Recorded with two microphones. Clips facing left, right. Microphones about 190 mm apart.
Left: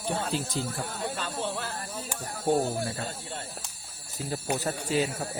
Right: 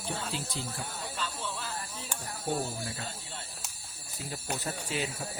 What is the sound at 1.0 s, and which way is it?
Speech, 65° left (ahead or behind).